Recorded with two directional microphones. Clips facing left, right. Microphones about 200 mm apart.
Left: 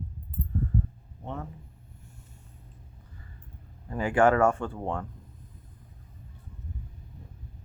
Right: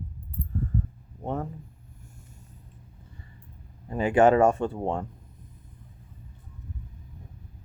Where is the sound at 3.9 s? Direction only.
20° right (ahead or behind).